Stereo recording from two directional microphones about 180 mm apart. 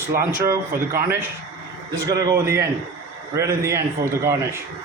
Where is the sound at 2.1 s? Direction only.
20° right (ahead or behind).